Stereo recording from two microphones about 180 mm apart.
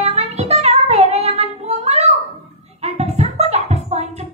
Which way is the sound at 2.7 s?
35° right (ahead or behind).